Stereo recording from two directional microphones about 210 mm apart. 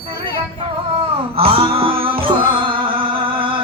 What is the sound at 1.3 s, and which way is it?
Music, 25° right (ahead or behind).